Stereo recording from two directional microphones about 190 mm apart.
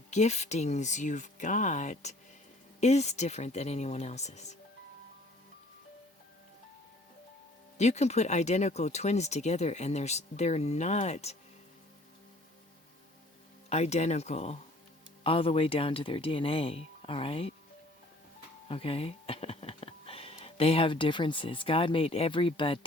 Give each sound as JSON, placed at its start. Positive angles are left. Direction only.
{"t": 0.1, "sound": "speech", "side_deg": 35}
{"t": 7.8, "sound": "speech", "side_deg": 35}
{"t": 13.7, "sound": "speech", "side_deg": 35}
{"t": 18.7, "sound": "speech", "side_deg": 30}